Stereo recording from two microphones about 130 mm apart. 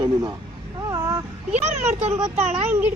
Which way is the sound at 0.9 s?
25° right (ahead or behind).